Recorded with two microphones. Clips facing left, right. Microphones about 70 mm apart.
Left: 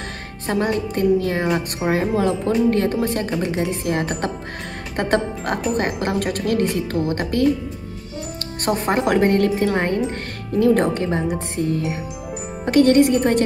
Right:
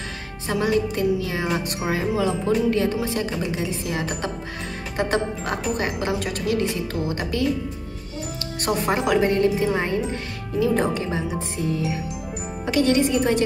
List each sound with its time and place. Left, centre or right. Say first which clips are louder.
0.5 s speech: left 1 dB; left
8.6 s speech: left 2 dB; left